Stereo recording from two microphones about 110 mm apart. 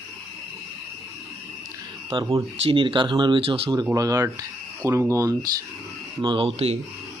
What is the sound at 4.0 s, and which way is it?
Speech, 30° right (ahead or behind).